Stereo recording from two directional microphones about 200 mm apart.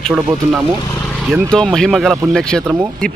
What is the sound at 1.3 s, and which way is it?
Speech, 5° left (ahead or behind).